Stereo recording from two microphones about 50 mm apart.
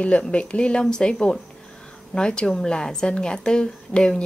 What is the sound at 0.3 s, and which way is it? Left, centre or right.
A woman's voice, left.